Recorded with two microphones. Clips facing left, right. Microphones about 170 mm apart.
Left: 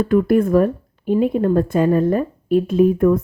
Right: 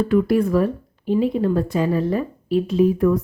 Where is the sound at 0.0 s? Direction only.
50° left (ahead or behind).